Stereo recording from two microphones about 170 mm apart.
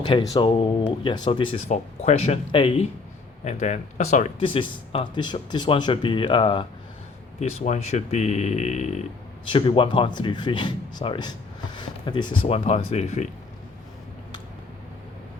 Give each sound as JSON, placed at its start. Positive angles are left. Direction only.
{"t": 0.1, "sound": "speech", "side_deg": 25}
{"t": 1.7, "sound": "speech", "side_deg": 40}
{"t": 3.4, "sound": "speech", "side_deg": 45}
{"t": 7.3, "sound": "speech", "side_deg": 45}
{"t": 9.5, "sound": "speech", "side_deg": 30}